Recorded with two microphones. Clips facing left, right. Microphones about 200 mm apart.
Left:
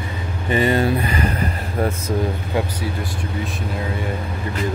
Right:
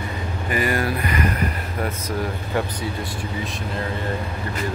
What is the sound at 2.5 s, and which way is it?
Speech, 15° left (ahead or behind).